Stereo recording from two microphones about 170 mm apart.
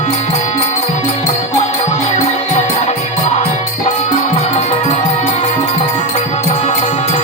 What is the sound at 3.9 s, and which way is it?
Music, 40° left (ahead or behind).